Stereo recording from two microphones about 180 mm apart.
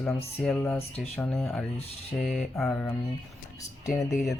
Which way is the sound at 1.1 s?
10° left (ahead or behind).